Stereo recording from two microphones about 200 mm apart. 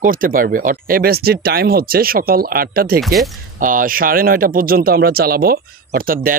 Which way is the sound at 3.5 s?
40° right (ahead or behind).